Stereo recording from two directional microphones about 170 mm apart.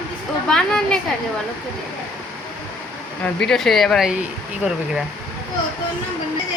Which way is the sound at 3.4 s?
Centre (ahead or behind).